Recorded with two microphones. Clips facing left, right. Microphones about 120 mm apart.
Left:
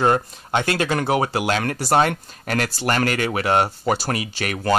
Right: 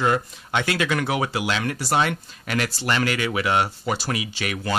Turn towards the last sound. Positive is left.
turn(degrees=45)  # may be behind; listen again after turning